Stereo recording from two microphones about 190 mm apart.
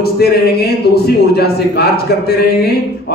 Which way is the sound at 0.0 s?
55° left (ahead or behind).